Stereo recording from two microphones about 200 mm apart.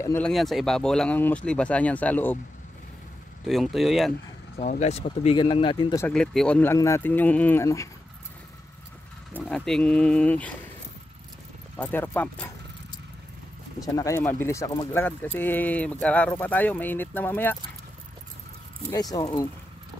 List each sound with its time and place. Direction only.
0.0 s speech: 15° left (ahead or behind)
0.3 s speech: centre (ahead or behind)
3.4 s speech: centre (ahead or behind)
4.6 s speech: 35° left (ahead or behind)
5.9 s speech: 5° left (ahead or behind)
9.4 s speech: 5° left (ahead or behind)
11.7 s speech: 10° left (ahead or behind)
13.8 s speech: 15° left (ahead or behind)
18.9 s speech: 20° left (ahead or behind)